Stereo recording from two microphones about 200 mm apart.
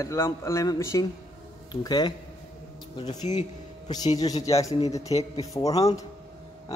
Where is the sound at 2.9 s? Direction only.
35° left (ahead or behind).